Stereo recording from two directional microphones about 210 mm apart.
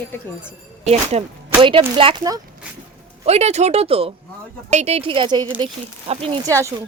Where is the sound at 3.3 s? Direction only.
30° right (ahead or behind).